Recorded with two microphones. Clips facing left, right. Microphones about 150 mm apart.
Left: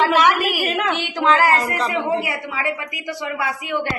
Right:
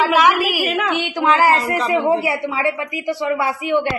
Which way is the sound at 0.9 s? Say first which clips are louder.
Right 1 dB; 15° right (ahead or behind).